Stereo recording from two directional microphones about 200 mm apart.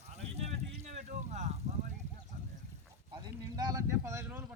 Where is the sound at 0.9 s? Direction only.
35° right (ahead or behind).